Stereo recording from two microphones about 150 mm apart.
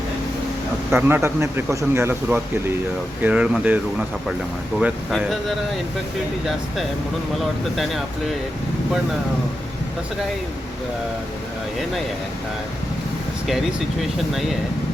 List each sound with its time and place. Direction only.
0.9 s speech: 10° right (ahead or behind)
7.3 s speech: centre (ahead or behind)